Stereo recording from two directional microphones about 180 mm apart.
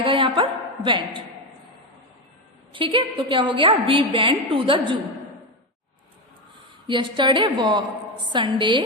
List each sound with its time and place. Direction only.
0.0 s a sound: 30° right (ahead or behind)
0.9 s a woman's voice: 25° right (ahead or behind)
2.7 s a woman's voice: 30° right (ahead or behind)
6.8 s a woman's voice: 25° right (ahead or behind)